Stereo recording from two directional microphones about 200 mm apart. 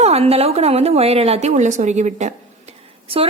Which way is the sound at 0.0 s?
30° right (ahead or behind).